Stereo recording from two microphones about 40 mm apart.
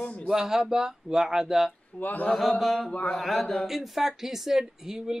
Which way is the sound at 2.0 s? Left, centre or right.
Left.